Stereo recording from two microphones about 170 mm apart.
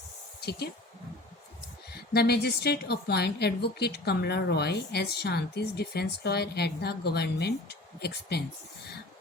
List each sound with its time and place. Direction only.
1.9 s a woman's voice: 70° left (ahead or behind)